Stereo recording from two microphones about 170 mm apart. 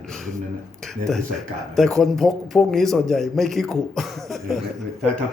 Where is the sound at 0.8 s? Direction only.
Centre (ahead or behind).